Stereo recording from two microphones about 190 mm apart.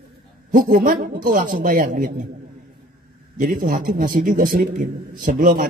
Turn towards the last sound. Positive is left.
turn(degrees=-45)  # may be behind; listen again after turning